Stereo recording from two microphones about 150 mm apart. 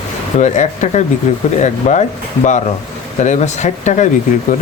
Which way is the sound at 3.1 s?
50° left (ahead or behind).